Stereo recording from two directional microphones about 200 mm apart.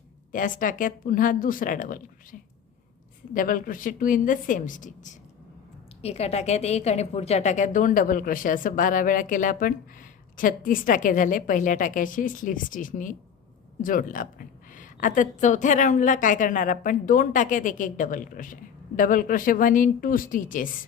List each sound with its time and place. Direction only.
0.3 s a woman's voice: 40° left (ahead or behind)
3.3 s a woman's voice: 45° left (ahead or behind)